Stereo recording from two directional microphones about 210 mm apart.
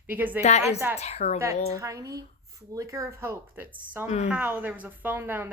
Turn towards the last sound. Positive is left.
turn(degrees=-10)  # may be behind; listen again after turning